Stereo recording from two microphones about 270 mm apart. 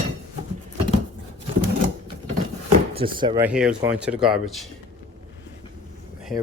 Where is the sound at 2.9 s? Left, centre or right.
Centre.